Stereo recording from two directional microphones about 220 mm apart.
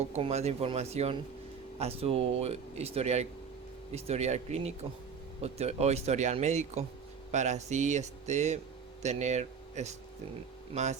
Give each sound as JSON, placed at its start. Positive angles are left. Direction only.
{"t": 0.1, "sound": "speech", "side_deg": -30}